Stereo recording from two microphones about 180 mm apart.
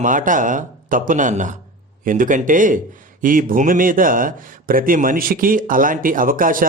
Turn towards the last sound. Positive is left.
turn(degrees=-50)  # may be behind; listen again after turning